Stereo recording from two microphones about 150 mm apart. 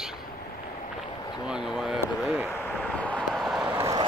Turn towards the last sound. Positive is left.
turn(degrees=-25)  # may be behind; listen again after turning